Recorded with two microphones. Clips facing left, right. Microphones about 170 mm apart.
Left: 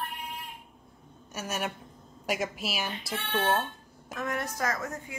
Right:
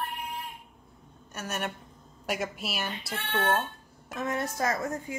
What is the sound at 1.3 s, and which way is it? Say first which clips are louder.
A woman's voice: left 1 dB; centre (ahead or behind).